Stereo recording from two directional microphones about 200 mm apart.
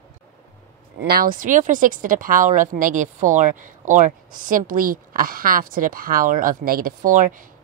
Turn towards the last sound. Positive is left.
turn(degrees=-40)  # may be behind; listen again after turning